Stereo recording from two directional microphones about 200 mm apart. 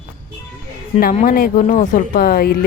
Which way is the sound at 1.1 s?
45° left (ahead or behind).